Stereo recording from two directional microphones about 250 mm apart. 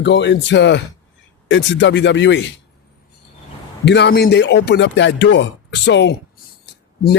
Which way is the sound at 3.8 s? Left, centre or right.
Left.